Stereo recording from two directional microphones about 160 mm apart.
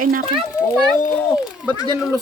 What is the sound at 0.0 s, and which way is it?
Speech, 60° right (ahead or behind).